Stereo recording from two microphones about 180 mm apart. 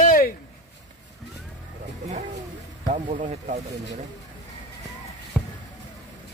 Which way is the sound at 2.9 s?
40° right (ahead or behind).